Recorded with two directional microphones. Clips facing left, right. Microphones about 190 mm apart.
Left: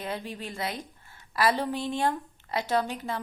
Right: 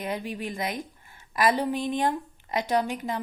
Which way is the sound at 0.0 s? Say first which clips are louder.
Right 3 dB; 15° right (ahead or behind).